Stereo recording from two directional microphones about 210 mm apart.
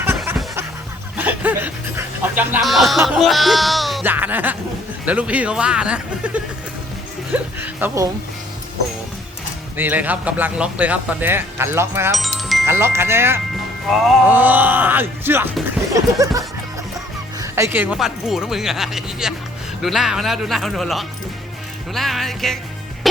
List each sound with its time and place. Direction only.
0.2 s a sound: centre (ahead or behind)
1.1 s music: 5° right (ahead or behind)
3.2 s speech: centre (ahead or behind)
9.7 s speech: 10° right (ahead or behind)
12.1 s chime: centre (ahead or behind)
12.6 s speech: 10° right (ahead or behind)